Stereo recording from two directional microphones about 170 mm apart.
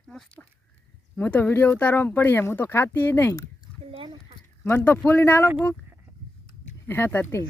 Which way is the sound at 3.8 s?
30° right (ahead or behind).